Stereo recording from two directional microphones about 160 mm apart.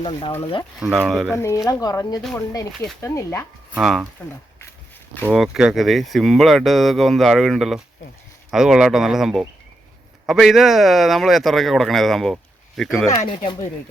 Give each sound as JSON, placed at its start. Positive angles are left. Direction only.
{"t": 0.0, "sound": "speech", "side_deg": 35}
{"t": 0.8, "sound": "a man's voice", "side_deg": -5}
{"t": 1.4, "sound": "speech", "side_deg": 20}
{"t": 3.8, "sound": "a man's voice", "side_deg": -5}
{"t": 5.2, "sound": "a man's voice", "side_deg": -5}
{"t": 13.1, "sound": "speech", "side_deg": 30}